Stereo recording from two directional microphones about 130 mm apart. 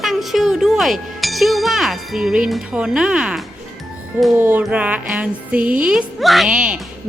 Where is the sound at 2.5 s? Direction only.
5° right (ahead or behind).